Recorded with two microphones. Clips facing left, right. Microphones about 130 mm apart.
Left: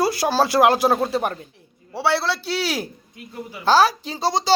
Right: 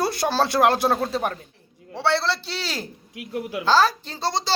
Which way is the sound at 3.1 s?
80° right.